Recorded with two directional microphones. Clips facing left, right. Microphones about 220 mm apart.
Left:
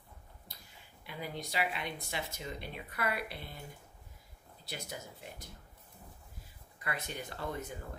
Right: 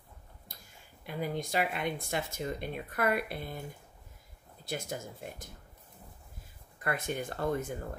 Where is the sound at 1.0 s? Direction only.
50° right (ahead or behind).